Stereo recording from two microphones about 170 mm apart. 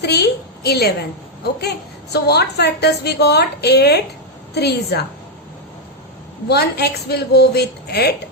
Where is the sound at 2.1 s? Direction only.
75° left (ahead or behind).